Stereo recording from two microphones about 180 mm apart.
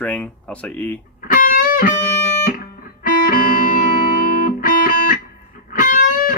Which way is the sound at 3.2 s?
50° left (ahead or behind).